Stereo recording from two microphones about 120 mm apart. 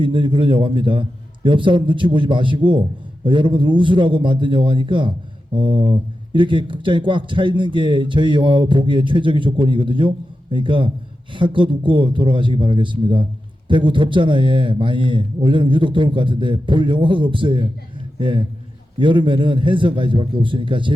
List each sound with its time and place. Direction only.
0.0 s a man's voice: 45° right (ahead or behind)